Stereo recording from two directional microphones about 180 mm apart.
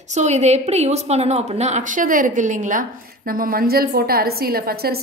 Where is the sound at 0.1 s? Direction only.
40° right (ahead or behind).